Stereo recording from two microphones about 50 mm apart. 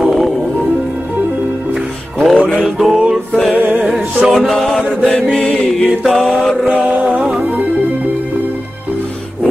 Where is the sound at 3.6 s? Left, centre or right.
Right.